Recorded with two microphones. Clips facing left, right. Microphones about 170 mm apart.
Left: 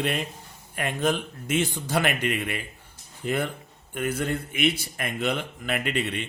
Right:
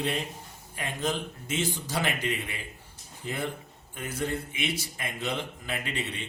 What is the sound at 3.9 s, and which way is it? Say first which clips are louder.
Speech: left 5 dB; 65° left (ahead or behind).